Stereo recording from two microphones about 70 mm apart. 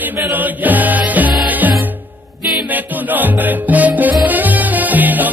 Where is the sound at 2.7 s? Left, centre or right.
Right.